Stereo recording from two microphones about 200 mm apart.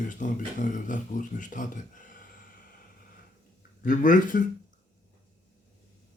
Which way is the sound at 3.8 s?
40° left (ahead or behind).